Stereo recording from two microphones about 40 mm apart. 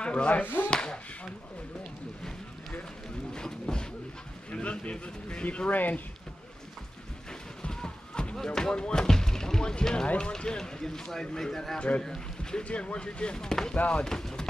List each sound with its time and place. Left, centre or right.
0.0 s speech: left
0.7 s speech: centre
3.3 s a sound: centre
4.5 s speech: left
5.7 s speech: left
7.6 s a sound: left
8.5 s speech: centre
10.6 s speech: centre
12.6 s speech: left